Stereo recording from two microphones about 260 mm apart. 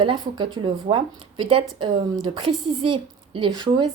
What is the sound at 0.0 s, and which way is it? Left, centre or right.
Speech, centre.